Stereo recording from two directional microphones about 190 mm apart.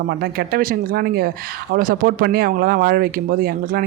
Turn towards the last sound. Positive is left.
turn(degrees=-50)  # may be behind; listen again after turning